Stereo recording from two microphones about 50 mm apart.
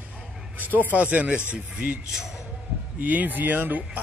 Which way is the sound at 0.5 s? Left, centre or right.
Right.